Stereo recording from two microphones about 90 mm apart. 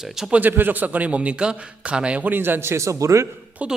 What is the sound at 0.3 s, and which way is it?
A man's voice, 20° right (ahead or behind).